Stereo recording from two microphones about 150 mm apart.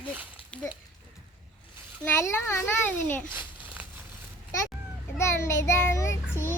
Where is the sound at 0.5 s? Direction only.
5° left (ahead or behind).